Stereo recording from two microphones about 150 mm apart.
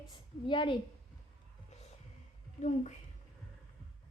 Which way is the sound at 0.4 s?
30° left (ahead or behind).